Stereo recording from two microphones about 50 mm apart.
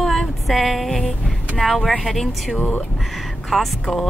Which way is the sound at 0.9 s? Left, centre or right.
Centre.